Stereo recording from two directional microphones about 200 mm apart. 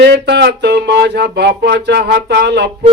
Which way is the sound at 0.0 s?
60° right (ahead or behind).